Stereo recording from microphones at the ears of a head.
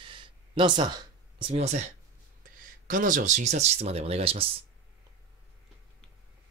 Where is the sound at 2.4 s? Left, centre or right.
Right.